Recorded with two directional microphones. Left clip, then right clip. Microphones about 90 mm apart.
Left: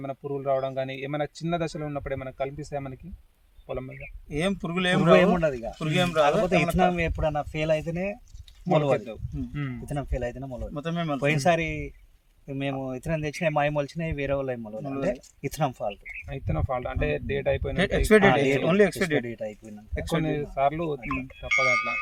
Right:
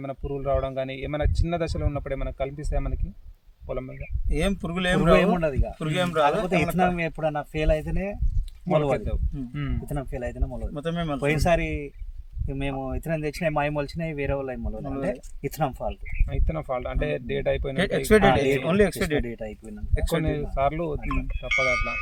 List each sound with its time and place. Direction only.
0.0 s speech: 45° right (ahead or behind)
4.3 s speech: 30° right (ahead or behind)
5.3 s speech: 20° left (ahead or behind)
5.8 s speech: 30° right (ahead or behind)
6.7 s speech: 35° left (ahead or behind)
9.0 s speech: 45° right (ahead or behind)
9.8 s speech: 30° left (ahead or behind)
10.8 s speech: 30° right (ahead or behind)
11.2 s speech: 40° left (ahead or behind)
16.3 s speech: 40° right (ahead or behind)
17.7 s speech: 30° right (ahead or behind)
19.2 s speech: 35° left (ahead or behind)
20.0 s speech: 30° right (ahead or behind)